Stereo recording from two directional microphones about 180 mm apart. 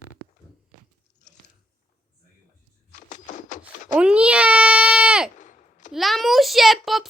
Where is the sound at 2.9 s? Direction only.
45° left (ahead or behind).